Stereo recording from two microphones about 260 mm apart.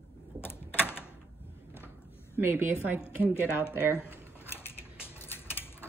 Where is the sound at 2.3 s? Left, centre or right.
Centre.